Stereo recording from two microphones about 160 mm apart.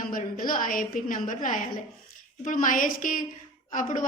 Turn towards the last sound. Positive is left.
turn(degrees=55)  # may be behind; listen again after turning